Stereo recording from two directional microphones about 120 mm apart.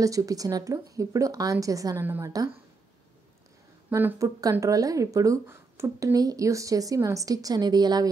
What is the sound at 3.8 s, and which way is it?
Speech, 20° right (ahead or behind).